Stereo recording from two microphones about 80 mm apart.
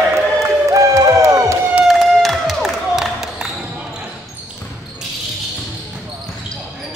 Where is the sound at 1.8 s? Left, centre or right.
Centre.